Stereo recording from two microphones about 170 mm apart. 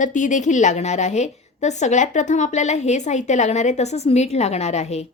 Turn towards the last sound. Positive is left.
turn(degrees=40)  # may be behind; listen again after turning